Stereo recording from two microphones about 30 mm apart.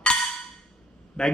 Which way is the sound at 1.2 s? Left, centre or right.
Left.